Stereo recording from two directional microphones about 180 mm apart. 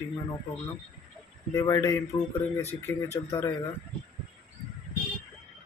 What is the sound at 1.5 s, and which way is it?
Speech, 15° left (ahead or behind).